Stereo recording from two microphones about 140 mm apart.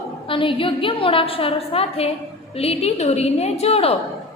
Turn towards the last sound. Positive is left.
turn(degrees=45)  # may be behind; listen again after turning